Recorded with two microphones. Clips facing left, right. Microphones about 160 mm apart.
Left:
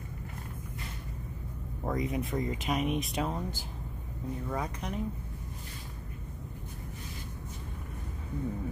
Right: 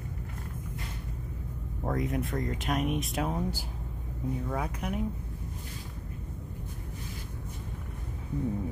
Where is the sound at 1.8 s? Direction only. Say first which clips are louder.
Right 1 dB; centre (ahead or behind).